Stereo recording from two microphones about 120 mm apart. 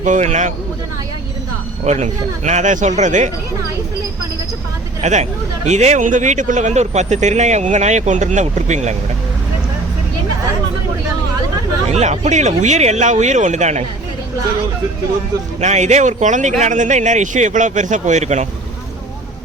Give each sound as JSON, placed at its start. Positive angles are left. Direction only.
{"t": 0.0, "sound": "speech", "side_deg": -85}
{"t": 1.8, "sound": "speech", "side_deg": -70}
{"t": 5.0, "sound": "speech", "side_deg": -75}
{"t": 11.9, "sound": "speech", "side_deg": -70}
{"t": 15.6, "sound": "speech", "side_deg": -75}